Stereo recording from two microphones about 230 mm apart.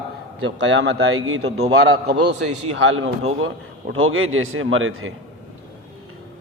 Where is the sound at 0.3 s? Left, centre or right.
Right.